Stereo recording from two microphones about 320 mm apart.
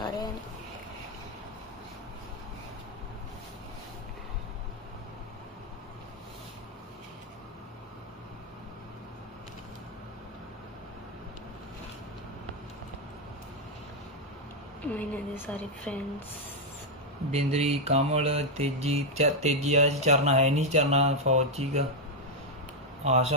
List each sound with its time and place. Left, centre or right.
14.8 s a woman's voice: centre
17.3 s mantra: centre
23.0 s mantra: centre